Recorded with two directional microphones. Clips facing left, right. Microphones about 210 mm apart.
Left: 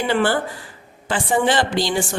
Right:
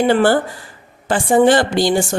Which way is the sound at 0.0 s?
40° right (ahead or behind).